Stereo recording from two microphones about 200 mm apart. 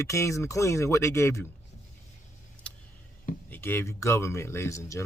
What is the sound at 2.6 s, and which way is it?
Vehicle, 5° left (ahead or behind).